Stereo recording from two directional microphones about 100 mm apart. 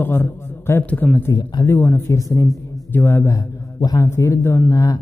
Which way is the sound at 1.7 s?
25° left (ahead or behind).